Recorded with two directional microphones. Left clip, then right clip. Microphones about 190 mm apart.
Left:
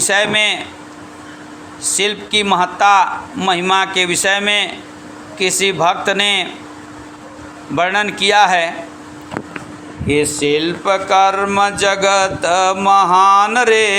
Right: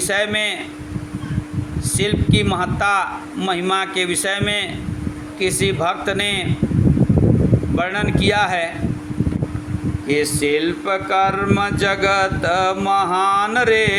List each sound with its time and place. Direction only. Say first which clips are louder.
0.0 s speech: left 5 dB; 15° right (ahead or behind)
1.9 s speech: left 4 dB; 15° right (ahead or behind)
7.8 s speech: left 8 dB; 15° right (ahead or behind)
10.1 s speech: left 3 dB; 10° right (ahead or behind)